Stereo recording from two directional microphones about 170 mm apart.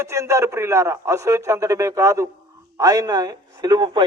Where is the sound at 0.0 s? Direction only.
15° right (ahead or behind).